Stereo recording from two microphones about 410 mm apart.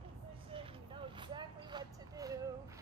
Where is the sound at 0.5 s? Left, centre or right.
Centre.